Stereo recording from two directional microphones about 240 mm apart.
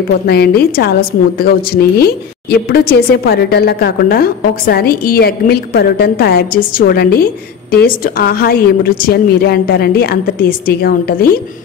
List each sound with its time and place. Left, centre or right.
0.3 s a woman's voice: left